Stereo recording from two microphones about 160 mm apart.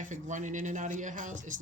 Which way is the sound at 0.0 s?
50° right (ahead or behind).